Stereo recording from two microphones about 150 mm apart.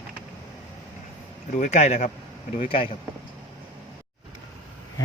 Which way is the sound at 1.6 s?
50° left (ahead or behind).